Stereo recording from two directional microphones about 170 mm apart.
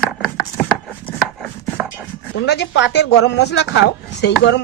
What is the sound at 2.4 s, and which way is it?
Speech, 90° left.